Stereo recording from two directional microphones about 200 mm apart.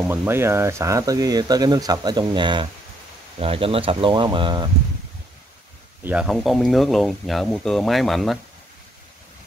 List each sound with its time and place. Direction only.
0.1 s speech: 10° right (ahead or behind)
6.0 s speech: 5° right (ahead or behind)